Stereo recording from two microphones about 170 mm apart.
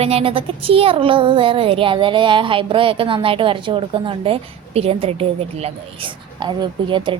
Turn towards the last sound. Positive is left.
turn(degrees=-30)  # may be behind; listen again after turning